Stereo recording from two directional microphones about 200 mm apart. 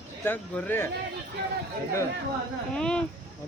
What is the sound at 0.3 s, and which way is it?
Speech, 10° left (ahead or behind).